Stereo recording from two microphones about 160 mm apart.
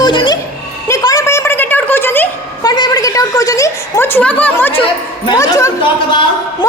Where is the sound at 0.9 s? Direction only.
20° left (ahead or behind).